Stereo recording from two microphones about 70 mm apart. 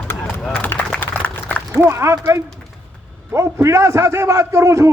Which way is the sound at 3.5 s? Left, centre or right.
Right.